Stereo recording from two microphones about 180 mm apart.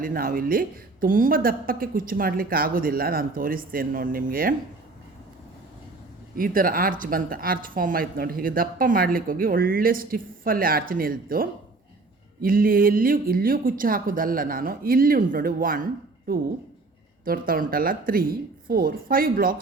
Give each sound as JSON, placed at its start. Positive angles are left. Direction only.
{"t": 0.0, "sound": "a woman's voice", "side_deg": -50}
{"t": 6.3, "sound": "a woman's voice", "side_deg": -50}